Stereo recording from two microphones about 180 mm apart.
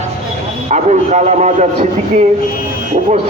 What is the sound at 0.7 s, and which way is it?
Speech, 40° right (ahead or behind).